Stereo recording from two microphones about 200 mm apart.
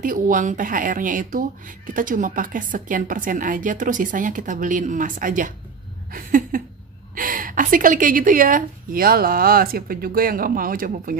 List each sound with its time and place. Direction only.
0.0 s a woman's voice: 40° right (ahead or behind)
6.1 s a sound: 45° right (ahead or behind)
7.2 s a woman's voice: 45° right (ahead or behind)